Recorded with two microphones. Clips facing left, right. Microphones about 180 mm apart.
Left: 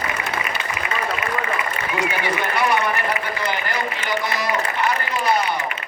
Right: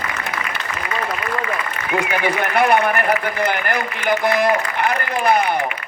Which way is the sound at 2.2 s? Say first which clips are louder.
Right 6 dB; 55° right (ahead or behind).